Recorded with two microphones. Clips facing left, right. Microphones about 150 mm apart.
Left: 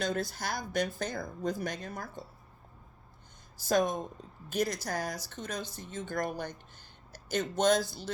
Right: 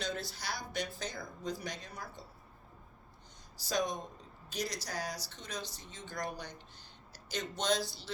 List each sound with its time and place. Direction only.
0.0 s speech: 45° left (ahead or behind)
3.6 s speech: 50° left (ahead or behind)